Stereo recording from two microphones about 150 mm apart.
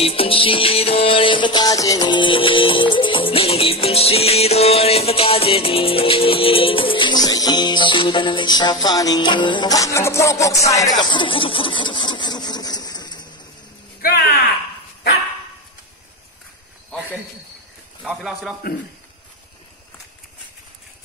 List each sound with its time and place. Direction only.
0.0 s music: 40° left (ahead or behind)
14.0 s a sound: 90° left
18.0 s a man's voice: centre (ahead or behind)